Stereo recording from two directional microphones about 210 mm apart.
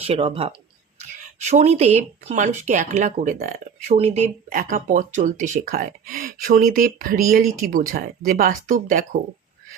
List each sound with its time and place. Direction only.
0.0 s speech: 30° right (ahead or behind)